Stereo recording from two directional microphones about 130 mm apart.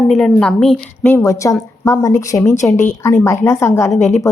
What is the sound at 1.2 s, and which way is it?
A woman's voice, 25° left (ahead or behind).